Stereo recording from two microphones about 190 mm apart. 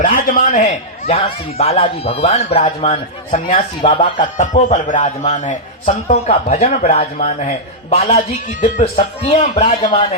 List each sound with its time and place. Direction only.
0.0 s a man's voice: 45° left (ahead or behind); by 4.0 s 30° left (ahead or behind)
4.2 s a man's voice: 40° left (ahead or behind)